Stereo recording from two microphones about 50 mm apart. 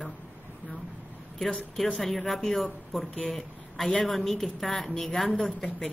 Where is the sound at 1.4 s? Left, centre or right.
Centre.